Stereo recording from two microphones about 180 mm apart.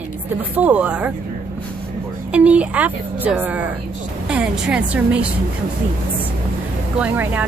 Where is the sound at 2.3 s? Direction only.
5° right (ahead or behind).